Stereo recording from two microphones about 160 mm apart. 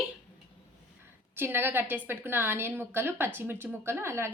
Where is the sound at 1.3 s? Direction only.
15° right (ahead or behind).